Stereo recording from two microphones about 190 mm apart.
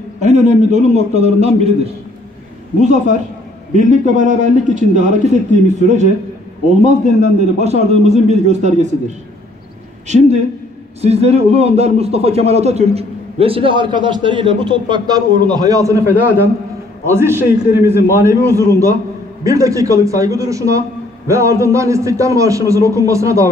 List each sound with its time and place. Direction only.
0.2 s a man's voice: 40° right (ahead or behind)
2.8 s a man's voice: 40° right (ahead or behind)
10.0 s a man's voice: 35° right (ahead or behind); by 16.0 s 20° right (ahead or behind)
17.1 s a man's voice: 15° right (ahead or behind)